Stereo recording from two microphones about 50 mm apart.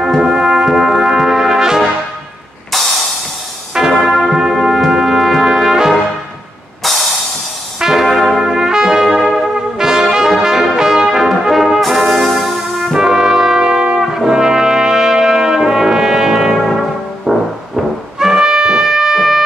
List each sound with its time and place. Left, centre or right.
0.0 s brass instrument: centre
3.9 s brass instrument: centre
7.8 s trumpet: centre
12.9 s brass instrument: centre